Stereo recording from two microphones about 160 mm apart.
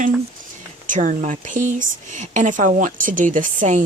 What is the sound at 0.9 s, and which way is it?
Speech, 50° right (ahead or behind).